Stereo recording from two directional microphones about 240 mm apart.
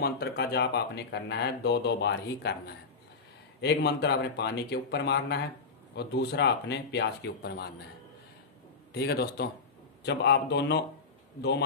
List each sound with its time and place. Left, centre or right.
0.0 s speech: left
8.9 s a man's voice: left